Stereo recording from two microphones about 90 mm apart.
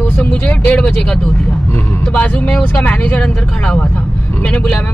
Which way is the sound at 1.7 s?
20° left (ahead or behind).